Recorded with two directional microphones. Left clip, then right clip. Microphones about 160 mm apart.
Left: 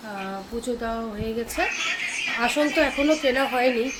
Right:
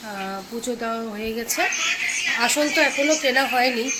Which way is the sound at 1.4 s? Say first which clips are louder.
Right 3 dB; centre (ahead or behind).